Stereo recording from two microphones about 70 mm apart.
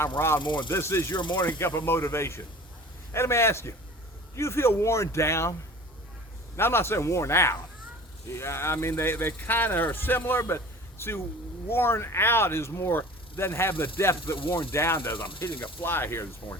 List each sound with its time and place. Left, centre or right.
0.0 s speech: left
1.1 s speech: left
1.5 s speech: left
6.6 s speech: left
10.4 s a sound: left
11.7 s speech: left